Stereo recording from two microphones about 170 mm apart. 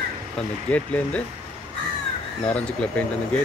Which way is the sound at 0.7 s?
10° left (ahead or behind).